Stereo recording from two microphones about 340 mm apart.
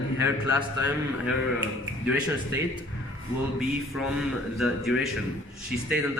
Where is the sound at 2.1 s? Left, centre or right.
Centre.